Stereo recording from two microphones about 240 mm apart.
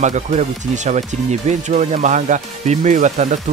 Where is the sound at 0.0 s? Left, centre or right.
Right.